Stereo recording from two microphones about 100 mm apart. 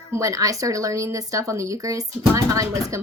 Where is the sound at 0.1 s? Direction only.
35° right (ahead or behind).